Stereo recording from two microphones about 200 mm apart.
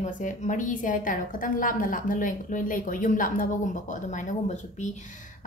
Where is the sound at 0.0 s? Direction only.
35° left (ahead or behind).